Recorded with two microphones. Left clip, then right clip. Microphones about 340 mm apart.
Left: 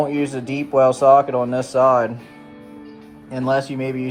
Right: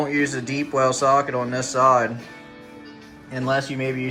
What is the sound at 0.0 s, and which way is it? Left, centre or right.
Speech, centre.